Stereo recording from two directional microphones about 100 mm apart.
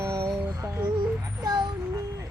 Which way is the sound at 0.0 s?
35° right (ahead or behind).